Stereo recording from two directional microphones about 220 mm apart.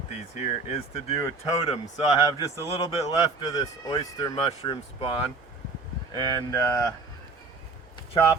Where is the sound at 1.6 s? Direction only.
25° left (ahead or behind).